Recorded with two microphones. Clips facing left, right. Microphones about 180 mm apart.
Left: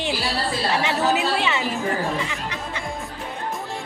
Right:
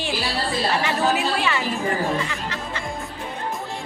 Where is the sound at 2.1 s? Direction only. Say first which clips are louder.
Right 1 dB; 15° left (ahead or behind).